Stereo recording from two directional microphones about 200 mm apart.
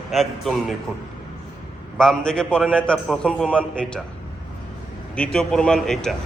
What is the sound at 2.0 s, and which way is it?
A man's voice, 5° left (ahead or behind).